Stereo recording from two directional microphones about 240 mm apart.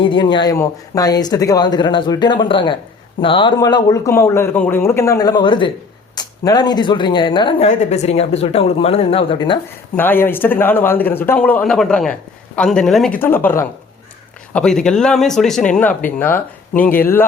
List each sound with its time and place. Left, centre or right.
0.0 s speech: centre
9.9 s speech: centre